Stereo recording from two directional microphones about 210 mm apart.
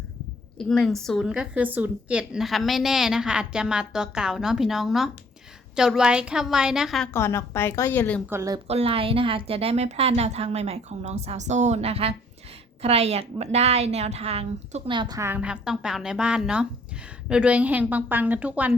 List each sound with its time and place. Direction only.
0.6 s a woman's voice: centre (ahead or behind)
7.1 s a woman's voice: 10° left (ahead or behind)
8.3 s a woman's voice: 15° right (ahead or behind)
8.6 s a woman's voice: 30° right (ahead or behind); by 18.7 s 5° right (ahead or behind)